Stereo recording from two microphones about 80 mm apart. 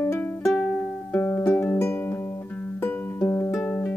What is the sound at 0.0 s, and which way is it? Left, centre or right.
Music, left.